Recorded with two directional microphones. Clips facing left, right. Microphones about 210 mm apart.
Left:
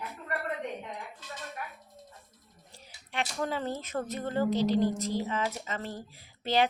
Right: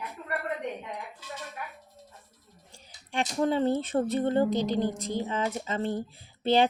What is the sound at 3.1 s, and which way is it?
Speech, 30° right (ahead or behind).